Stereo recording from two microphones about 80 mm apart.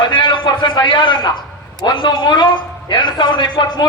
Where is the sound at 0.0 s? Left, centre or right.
Left.